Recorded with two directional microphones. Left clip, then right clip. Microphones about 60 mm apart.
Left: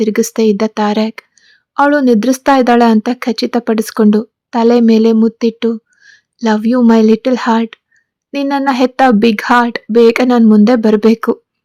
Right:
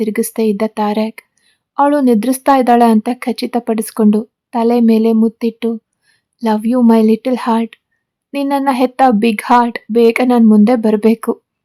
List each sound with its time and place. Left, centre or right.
0.0 s speech: centre
1.4 s a sound: centre
2.0 s speech: centre
4.5 s speech: left
6.0 s a sound: left
6.6 s speech: centre
6.8 s speech: left